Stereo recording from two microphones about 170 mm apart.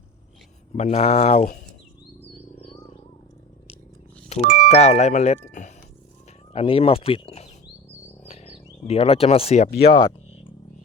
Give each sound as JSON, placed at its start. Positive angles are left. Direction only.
{"t": 0.7, "sound": "speech", "side_deg": 45}
{"t": 2.3, "sound": "wild animals", "side_deg": 40}
{"t": 4.4, "sound": "speech", "side_deg": -75}
{"t": 4.7, "sound": "speech", "side_deg": 40}
{"t": 6.5, "sound": "speech", "side_deg": 35}
{"t": 8.3, "sound": "a sound", "side_deg": 40}